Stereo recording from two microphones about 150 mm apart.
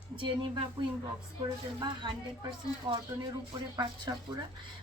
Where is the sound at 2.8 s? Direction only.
30° right (ahead or behind).